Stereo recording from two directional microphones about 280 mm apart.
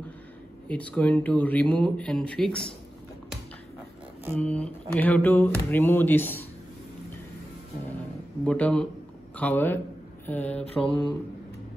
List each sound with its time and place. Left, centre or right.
0.7 s speech: centre
4.4 s speech: centre
8.5 s speech: centre
10.9 s speech: centre